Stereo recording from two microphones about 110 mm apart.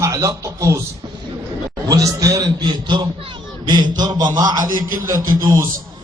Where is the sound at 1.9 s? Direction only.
35° right (ahead or behind).